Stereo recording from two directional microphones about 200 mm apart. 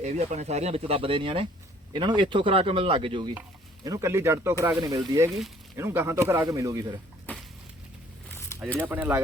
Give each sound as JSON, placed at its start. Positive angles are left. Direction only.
{"t": 0.0, "sound": "speech", "side_deg": -35}
{"t": 3.8, "sound": "speech", "side_deg": -15}
{"t": 8.3, "sound": "a sound", "side_deg": 15}
{"t": 8.6, "sound": "speech", "side_deg": 10}
{"t": 8.9, "sound": "speech", "side_deg": -10}